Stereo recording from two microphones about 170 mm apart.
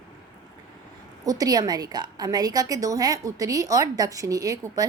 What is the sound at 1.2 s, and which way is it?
A woman's voice, 20° right (ahead or behind).